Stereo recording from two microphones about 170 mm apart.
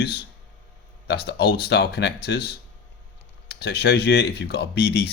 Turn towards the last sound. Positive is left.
turn(degrees=75)  # may be behind; listen again after turning